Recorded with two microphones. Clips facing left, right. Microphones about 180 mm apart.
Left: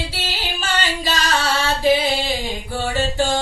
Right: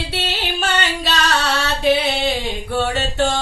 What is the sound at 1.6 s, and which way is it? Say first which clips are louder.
Music: left 1 dB; 65° right (ahead or behind).